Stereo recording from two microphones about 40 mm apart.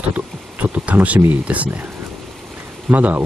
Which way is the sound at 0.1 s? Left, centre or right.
Right.